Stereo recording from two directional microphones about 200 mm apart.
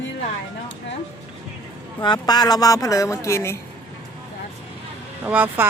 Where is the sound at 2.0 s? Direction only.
20° left (ahead or behind).